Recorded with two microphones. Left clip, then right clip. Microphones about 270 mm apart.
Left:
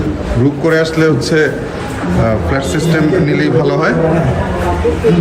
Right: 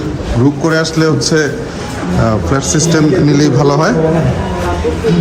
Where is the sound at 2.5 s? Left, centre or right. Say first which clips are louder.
Right 2 dB; centre.